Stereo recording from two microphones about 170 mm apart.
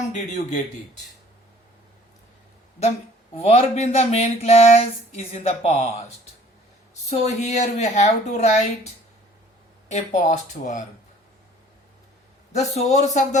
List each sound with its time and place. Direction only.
0.1 s speech: 45° left (ahead or behind)
2.8 s speech: 40° left (ahead or behind)
7.2 s speech: 40° left (ahead or behind)
9.9 s speech: 40° left (ahead or behind)
12.5 s speech: 40° left (ahead or behind)